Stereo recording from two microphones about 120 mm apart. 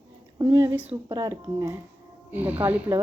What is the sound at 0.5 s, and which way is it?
A woman's voice, 20° right (ahead or behind).